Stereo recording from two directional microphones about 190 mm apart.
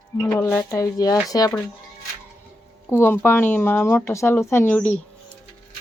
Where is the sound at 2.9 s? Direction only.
10° left (ahead or behind).